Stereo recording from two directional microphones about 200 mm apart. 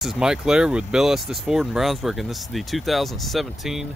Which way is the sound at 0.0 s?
5° right (ahead or behind).